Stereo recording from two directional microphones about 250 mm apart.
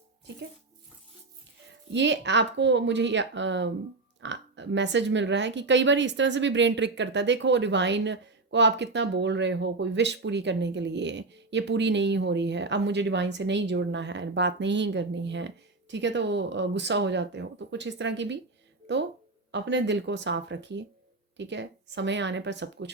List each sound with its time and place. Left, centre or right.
1.9 s speech: right